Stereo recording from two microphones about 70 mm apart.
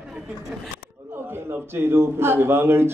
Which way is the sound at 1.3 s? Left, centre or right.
Right.